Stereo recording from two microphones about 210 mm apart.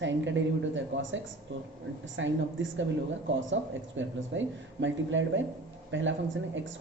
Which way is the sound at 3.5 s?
65° right (ahead or behind).